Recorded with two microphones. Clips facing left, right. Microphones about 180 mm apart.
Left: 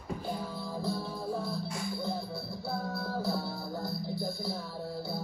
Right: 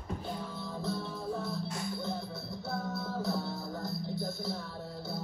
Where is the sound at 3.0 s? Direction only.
5° left (ahead or behind).